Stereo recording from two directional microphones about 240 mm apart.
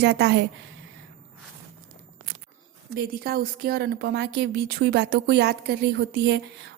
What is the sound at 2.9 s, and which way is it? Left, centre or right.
A woman's voice, right.